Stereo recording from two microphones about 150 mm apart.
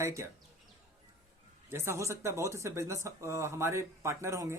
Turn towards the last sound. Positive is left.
turn(degrees=-20)  # may be behind; listen again after turning